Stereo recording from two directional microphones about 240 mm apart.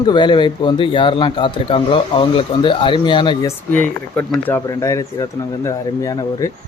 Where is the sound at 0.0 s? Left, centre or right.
Centre.